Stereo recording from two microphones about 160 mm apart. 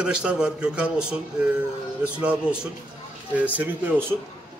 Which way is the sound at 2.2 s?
5° right (ahead or behind).